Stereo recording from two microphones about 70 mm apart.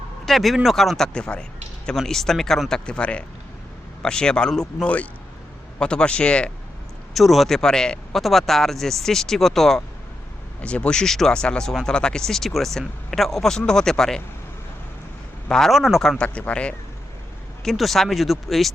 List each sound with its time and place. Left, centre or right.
0.3 s speech: centre
7.1 s speech: centre
10.6 s speech: centre
15.4 s speech: centre
17.6 s speech: centre